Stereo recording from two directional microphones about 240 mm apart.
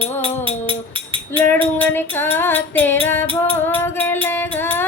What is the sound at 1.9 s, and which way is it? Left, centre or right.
Music, centre.